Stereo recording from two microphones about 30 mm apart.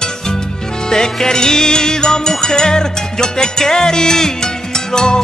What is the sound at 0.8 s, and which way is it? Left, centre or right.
Music, left.